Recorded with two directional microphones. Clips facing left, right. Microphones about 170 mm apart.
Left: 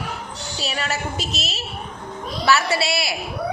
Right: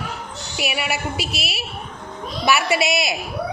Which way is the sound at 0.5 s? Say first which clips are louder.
Right 2 dB; 10° right (ahead or behind).